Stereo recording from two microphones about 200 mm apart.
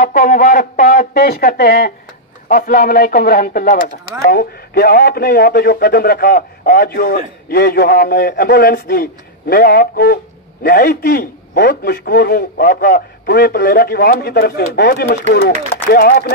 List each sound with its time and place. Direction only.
0.0 s speech: 40° left (ahead or behind)